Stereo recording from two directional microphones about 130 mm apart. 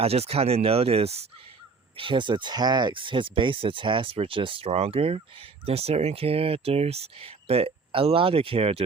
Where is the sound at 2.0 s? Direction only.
40° right (ahead or behind).